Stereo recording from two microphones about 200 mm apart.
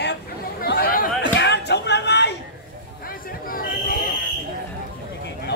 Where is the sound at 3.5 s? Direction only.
45° left (ahead or behind).